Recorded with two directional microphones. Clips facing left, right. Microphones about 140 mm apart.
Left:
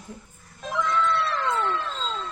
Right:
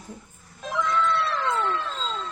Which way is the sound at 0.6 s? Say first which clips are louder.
Even; centre (ahead or behind).